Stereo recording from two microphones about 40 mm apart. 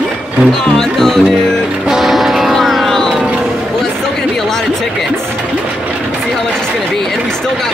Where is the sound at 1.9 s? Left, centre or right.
Centre.